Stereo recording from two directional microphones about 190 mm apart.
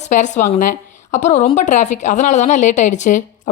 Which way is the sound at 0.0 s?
40° left (ahead or behind).